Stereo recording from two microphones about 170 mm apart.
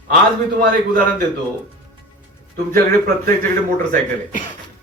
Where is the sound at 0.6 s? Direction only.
55° right (ahead or behind).